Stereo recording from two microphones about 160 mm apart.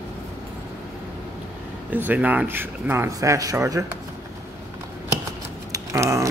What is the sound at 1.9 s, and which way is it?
Speech, 10° right (ahead or behind).